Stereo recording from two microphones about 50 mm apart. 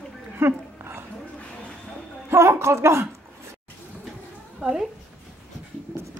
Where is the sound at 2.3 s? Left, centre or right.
Right.